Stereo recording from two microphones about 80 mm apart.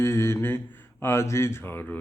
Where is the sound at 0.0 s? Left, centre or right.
Left.